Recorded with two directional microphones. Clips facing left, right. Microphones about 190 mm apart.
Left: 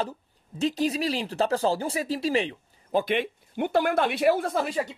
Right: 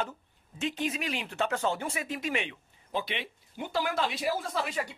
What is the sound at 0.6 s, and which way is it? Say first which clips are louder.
Speech: left 7 dB; 35° left (ahead or behind).